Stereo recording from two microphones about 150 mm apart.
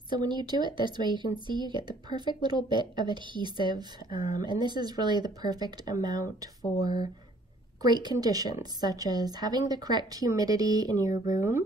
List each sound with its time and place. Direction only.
0.1 s speech: 30° right (ahead or behind)
7.8 s speech: 25° right (ahead or behind)